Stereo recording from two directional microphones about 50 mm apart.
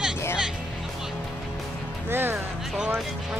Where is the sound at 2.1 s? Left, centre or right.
Right.